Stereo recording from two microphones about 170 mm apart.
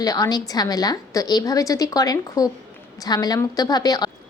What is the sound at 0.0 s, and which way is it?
Speech, 20° left (ahead or behind).